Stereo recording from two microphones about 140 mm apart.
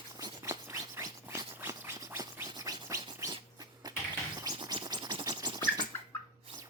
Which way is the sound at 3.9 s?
30° right (ahead or behind).